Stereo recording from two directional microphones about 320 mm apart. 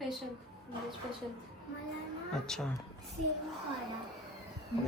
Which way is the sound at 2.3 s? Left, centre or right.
Centre.